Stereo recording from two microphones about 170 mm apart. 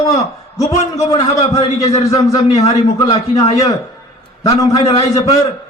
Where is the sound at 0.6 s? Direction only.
40° left (ahead or behind).